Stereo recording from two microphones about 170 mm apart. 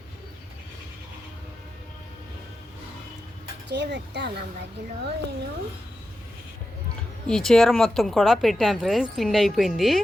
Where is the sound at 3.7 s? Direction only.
90° right.